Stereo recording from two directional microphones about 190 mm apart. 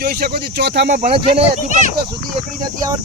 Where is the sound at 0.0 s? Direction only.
55° right (ahead or behind).